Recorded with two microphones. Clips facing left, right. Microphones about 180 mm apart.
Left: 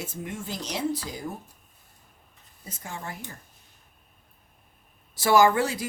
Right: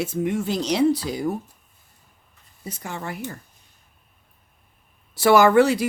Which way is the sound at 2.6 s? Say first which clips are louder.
Right 6 dB; 75° right (ahead or behind).